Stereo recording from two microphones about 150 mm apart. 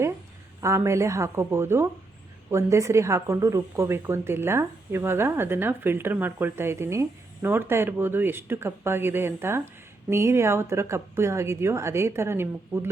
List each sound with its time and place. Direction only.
0.6 s a woman's voice: 20° right (ahead or behind)